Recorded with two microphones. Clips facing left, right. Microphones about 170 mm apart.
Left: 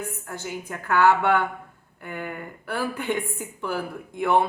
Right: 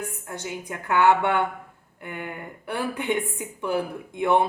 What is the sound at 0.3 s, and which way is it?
A woman's voice, 20° right (ahead or behind).